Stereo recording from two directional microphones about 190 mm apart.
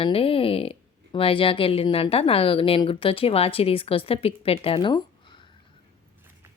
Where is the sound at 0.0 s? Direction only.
30° left (ahead or behind).